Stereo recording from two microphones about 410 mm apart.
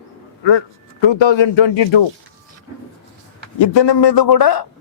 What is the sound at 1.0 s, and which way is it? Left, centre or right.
Speech, left.